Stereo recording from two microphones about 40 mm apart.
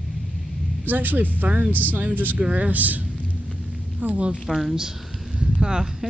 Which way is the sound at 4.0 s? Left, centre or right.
Right.